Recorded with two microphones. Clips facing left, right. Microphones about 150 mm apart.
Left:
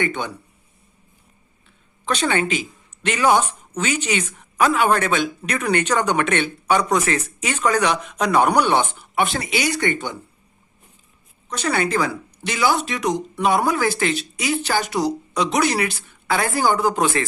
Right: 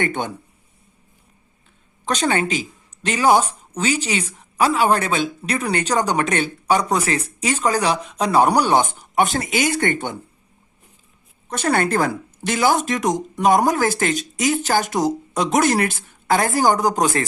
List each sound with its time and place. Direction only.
0.0 s speech: 50° right (ahead or behind)
2.0 s a woman's voice: 40° right (ahead or behind)
11.4 s speech: 50° right (ahead or behind)